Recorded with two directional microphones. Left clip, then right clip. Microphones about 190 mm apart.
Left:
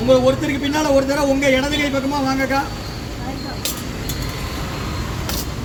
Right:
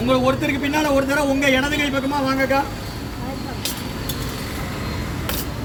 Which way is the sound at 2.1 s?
15° left (ahead or behind).